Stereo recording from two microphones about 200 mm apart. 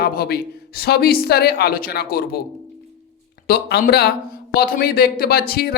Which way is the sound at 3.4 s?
50° left (ahead or behind).